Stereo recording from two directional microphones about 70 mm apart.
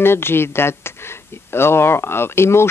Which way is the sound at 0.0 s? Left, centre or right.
Left.